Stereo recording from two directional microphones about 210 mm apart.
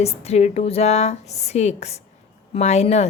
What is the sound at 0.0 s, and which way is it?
A woman's voice, 30° left (ahead or behind).